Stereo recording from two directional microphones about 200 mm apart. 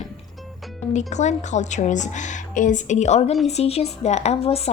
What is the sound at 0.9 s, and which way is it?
Speech, 35° left (ahead or behind).